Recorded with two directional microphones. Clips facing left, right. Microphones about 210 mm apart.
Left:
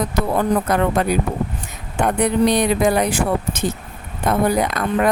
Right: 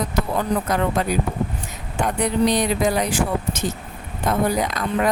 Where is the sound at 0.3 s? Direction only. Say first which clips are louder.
Left 4 dB; 55° left (ahead or behind).